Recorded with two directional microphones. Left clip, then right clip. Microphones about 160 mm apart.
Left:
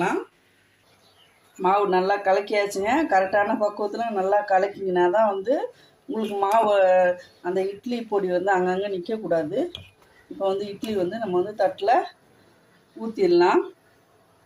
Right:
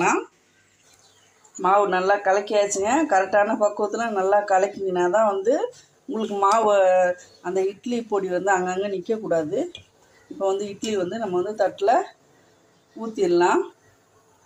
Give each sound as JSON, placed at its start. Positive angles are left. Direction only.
{"t": 0.0, "sound": "speech", "side_deg": -5}
{"t": 1.6, "sound": "speech", "side_deg": -5}
{"t": 13.0, "sound": "speech", "side_deg": 0}